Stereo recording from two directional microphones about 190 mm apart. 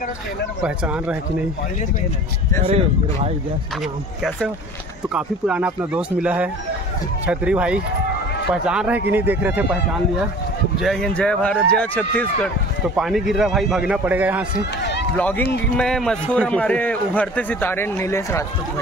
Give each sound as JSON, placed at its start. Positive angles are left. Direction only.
{"t": 0.6, "sound": "speech", "side_deg": -5}
{"t": 2.6, "sound": "speech", "side_deg": -35}
{"t": 5.1, "sound": "a man's voice", "side_deg": -5}
{"t": 10.8, "sound": "a man's voice", "side_deg": 0}
{"t": 15.1, "sound": "a man's voice", "side_deg": 5}